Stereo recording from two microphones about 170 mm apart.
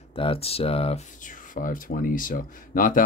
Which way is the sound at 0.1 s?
35° left (ahead or behind).